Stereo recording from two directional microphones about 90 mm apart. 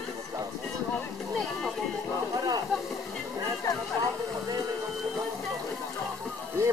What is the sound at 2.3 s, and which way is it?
Speech, 45° right (ahead or behind).